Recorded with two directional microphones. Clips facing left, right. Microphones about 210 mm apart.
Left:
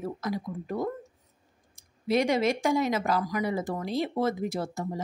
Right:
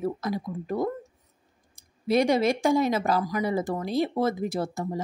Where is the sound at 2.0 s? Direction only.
35° right (ahead or behind).